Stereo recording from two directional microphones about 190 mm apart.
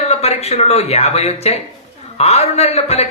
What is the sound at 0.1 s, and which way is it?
A man's voice, 35° left (ahead or behind).